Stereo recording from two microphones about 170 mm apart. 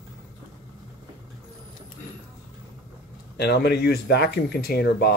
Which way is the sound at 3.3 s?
75° left (ahead or behind).